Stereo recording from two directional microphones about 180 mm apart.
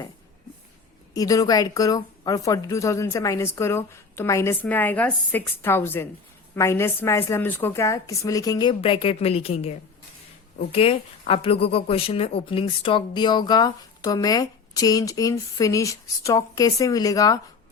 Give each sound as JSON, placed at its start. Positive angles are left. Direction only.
{"t": 1.1, "sound": "speech", "side_deg": 20}